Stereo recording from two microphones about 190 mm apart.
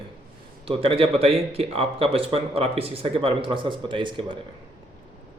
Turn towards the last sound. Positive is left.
turn(degrees=-25)  # may be behind; listen again after turning